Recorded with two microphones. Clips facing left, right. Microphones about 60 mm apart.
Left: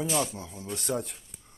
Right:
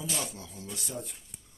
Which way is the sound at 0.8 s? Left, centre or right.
Left.